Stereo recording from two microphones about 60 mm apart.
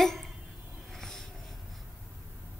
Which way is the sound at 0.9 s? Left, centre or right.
Centre.